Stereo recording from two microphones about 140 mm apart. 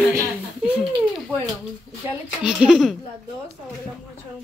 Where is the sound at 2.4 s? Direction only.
5° right (ahead or behind).